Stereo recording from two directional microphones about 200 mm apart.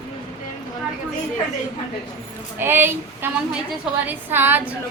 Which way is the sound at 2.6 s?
10° right (ahead or behind).